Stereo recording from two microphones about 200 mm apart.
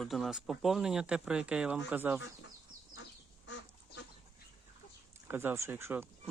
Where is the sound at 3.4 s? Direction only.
65° left (ahead or behind).